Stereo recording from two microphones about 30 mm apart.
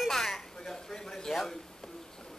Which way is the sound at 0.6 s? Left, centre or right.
Left.